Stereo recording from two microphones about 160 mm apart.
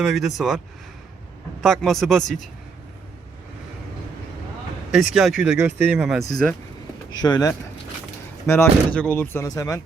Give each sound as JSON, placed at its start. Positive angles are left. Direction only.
{"t": 0.0, "sound": "speech", "side_deg": 0}
{"t": 1.6, "sound": "speech", "side_deg": 0}
{"t": 4.9, "sound": "speech", "side_deg": -5}
{"t": 7.1, "sound": "speech", "side_deg": 25}